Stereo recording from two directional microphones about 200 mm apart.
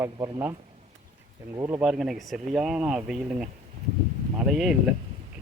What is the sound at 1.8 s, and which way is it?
Speech, centre (ahead or behind).